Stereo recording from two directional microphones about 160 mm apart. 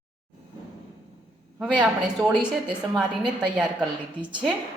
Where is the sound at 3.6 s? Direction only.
5° right (ahead or behind).